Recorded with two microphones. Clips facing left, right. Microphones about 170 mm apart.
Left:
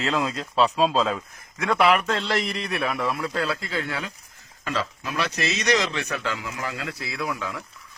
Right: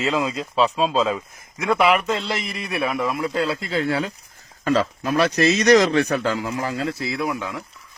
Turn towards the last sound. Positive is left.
turn(degrees=-25)  # may be behind; listen again after turning